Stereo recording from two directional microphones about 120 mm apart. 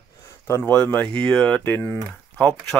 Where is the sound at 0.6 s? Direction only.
10° left (ahead or behind).